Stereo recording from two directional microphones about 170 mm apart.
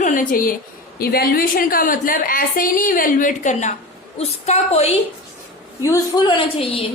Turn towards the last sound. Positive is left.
turn(degrees=35)  # may be behind; listen again after turning